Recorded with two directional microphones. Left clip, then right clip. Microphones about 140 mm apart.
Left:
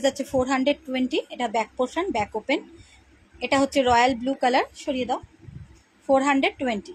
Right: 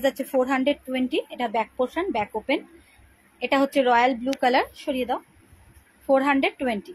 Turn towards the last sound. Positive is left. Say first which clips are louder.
# even
turn(degrees=0)  # may be behind; listen again after turning